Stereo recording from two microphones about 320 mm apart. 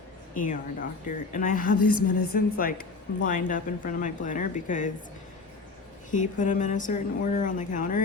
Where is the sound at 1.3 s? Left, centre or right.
Left.